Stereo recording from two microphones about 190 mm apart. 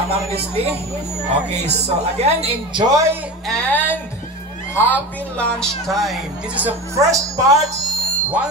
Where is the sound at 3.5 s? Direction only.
10° left (ahead or behind); by 7.8 s 15° right (ahead or behind).